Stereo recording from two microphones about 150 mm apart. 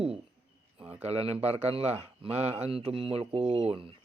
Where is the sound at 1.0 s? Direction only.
40° right (ahead or behind).